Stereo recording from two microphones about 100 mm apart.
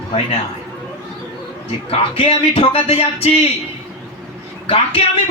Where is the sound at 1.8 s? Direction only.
70° left (ahead or behind); by 3.4 s 85° left.